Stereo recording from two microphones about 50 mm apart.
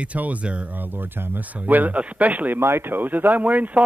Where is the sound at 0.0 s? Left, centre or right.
Right.